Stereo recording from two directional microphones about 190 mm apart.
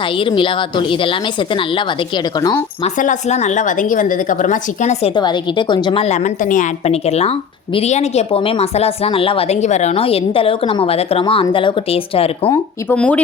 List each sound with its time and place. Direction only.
0.2 s a woman's voice: 25° left (ahead or behind)
2.8 s a woman's voice: 40° left (ahead or behind)
5.1 s a woman's voice: 25° left (ahead or behind)
12.9 s speech: 5° left (ahead or behind)